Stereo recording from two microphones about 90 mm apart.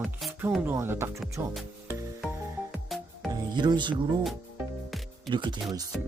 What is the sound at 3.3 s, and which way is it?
Speech, 55° right (ahead or behind).